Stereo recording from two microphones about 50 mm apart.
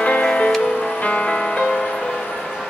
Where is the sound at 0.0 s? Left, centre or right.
Left.